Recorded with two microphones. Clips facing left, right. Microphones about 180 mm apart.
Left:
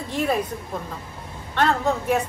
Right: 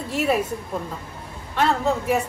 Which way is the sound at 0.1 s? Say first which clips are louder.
Right 2 dB; 5° right (ahead or behind).